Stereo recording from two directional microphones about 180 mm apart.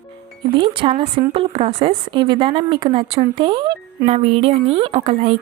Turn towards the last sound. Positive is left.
turn(degrees=-35)  # may be behind; listen again after turning